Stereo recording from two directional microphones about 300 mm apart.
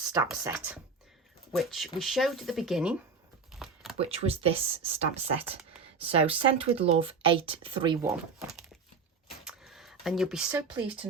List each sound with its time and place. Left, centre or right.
0.1 s speech: centre
3.9 s speech: centre
9.4 s a sound: centre
10.8 s speech: centre